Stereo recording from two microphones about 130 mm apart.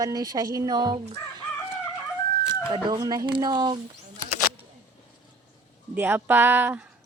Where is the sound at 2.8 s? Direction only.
30° right (ahead or behind).